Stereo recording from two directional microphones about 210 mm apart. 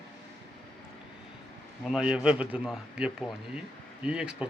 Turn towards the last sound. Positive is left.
turn(degrees=-5)  # may be behind; listen again after turning